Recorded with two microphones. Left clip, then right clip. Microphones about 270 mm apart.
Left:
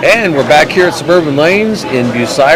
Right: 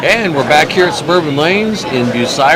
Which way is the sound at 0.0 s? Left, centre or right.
Left.